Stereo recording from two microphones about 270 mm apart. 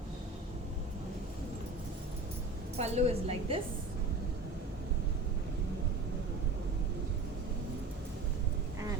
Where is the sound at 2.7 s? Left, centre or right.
Right.